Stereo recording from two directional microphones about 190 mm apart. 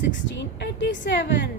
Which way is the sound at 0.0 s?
70° left (ahead or behind).